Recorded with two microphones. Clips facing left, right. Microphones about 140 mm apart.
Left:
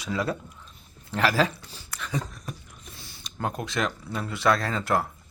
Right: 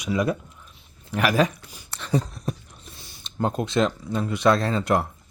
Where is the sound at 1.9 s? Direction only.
35° right (ahead or behind).